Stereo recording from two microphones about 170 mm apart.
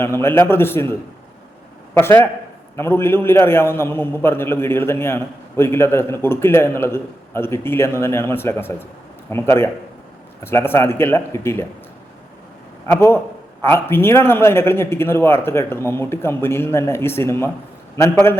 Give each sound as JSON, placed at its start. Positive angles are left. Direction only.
{"t": 0.0, "sound": "a man's voice", "side_deg": 15}
{"t": 2.0, "sound": "a man's voice", "side_deg": 15}
{"t": 12.9, "sound": "a man's voice", "side_deg": 15}